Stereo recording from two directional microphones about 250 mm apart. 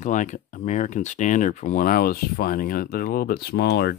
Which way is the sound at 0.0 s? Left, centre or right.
Left.